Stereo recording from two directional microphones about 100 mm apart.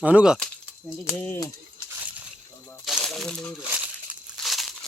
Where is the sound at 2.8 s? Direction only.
Centre (ahead or behind).